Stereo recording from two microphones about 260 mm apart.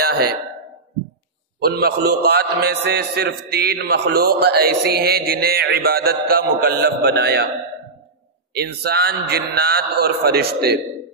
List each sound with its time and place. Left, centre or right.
1.6 s a man's voice: right
8.6 s a man's voice: right